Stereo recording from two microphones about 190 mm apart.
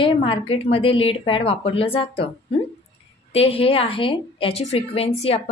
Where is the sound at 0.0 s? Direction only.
30° left (ahead or behind).